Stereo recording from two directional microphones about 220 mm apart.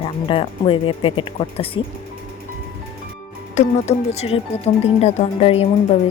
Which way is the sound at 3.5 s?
30° left (ahead or behind).